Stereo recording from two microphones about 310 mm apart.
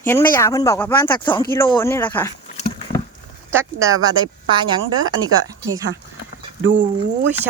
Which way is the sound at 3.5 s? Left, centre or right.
Centre.